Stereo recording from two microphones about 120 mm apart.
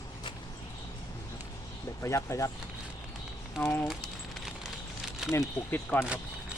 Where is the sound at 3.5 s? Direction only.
15° left (ahead or behind).